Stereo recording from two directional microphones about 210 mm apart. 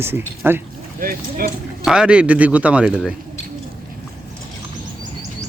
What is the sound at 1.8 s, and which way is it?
A man's voice, 5° right (ahead or behind).